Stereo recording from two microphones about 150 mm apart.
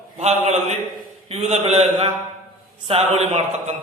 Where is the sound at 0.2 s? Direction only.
45° right (ahead or behind).